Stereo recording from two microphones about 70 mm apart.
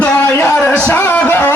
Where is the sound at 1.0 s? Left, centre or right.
Left.